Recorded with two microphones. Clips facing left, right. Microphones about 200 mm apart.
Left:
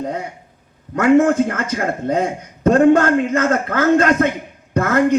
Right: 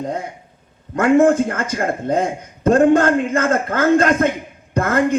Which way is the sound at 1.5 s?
50° right (ahead or behind).